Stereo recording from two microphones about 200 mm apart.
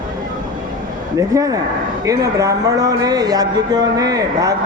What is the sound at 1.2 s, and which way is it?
Speech, 15° right (ahead or behind).